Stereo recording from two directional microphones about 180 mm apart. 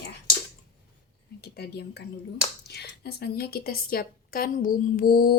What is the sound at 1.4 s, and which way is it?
A woman's voice, 65° left (ahead or behind).